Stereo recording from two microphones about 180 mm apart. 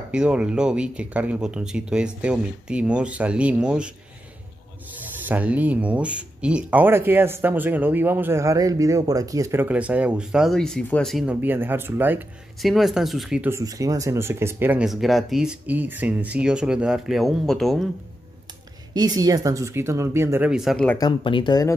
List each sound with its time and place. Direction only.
0.1 s speech: 5° right (ahead or behind)
4.9 s speech: 10° right (ahead or behind)
18.9 s speech: 20° right (ahead or behind); by 21.0 s 5° left (ahead or behind)
21.0 s speech: 30° left (ahead or behind)